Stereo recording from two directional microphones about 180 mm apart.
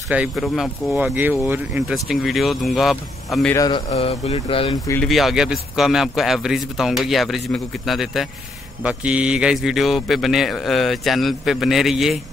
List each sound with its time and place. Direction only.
0.1 s speech: 5° right (ahead or behind)
3.5 s a man's voice: 25° left (ahead or behind)
3.9 s speech: 35° left (ahead or behind)
5.0 s speech: centre (ahead or behind)